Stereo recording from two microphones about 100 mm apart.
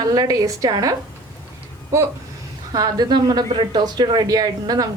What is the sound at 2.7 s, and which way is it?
A woman's voice, 40° right (ahead or behind).